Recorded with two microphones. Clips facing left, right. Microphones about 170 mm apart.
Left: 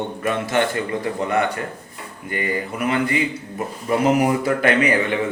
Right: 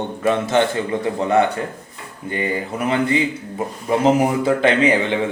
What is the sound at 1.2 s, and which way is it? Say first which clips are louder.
Speech: right 5 dB; 25° right (ahead or behind).